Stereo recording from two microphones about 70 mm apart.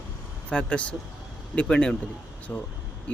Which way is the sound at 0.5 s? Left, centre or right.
Centre.